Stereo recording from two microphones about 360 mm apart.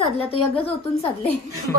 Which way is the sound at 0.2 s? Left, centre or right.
Centre.